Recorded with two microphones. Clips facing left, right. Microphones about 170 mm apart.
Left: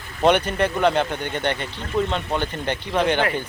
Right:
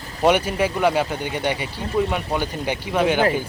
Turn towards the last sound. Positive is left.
turn(degrees=-5)  # may be behind; listen again after turning